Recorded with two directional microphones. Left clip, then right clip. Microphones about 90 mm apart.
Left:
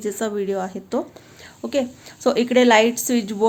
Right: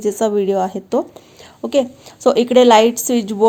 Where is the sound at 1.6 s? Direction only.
50° right (ahead or behind).